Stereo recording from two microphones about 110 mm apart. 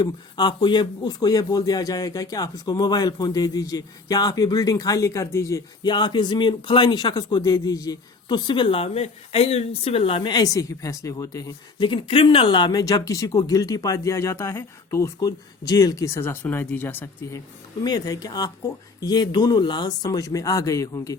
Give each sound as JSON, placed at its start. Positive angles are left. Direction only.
{"t": 0.0, "sound": "speech", "side_deg": 40}
{"t": 5.8, "sound": "speech", "side_deg": 45}
{"t": 11.9, "sound": "speech", "side_deg": 50}
{"t": 17.8, "sound": "speech", "side_deg": 35}